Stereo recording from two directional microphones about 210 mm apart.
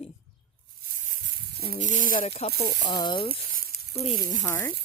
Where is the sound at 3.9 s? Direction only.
30° left (ahead or behind).